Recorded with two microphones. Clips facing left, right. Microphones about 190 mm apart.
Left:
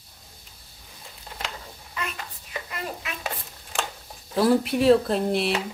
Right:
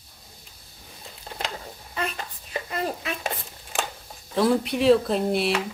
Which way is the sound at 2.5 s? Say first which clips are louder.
Right 5 dB; 35° right (ahead or behind).